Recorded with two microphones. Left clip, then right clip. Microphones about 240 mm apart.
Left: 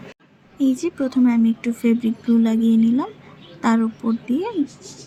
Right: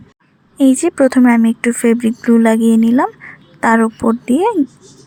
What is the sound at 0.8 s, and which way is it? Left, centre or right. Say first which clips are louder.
Speech: right 9 dB; right.